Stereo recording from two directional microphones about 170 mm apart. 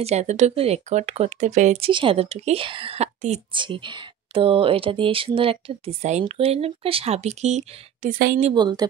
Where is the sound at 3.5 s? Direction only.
30° right (ahead or behind).